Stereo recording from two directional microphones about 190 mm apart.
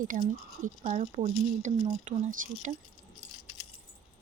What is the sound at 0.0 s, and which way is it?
Speech, 45° right (ahead or behind).